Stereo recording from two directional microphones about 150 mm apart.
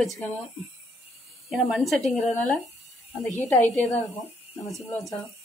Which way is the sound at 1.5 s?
Centre (ahead or behind).